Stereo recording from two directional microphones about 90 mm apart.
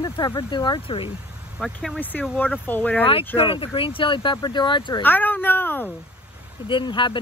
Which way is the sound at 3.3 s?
90° left.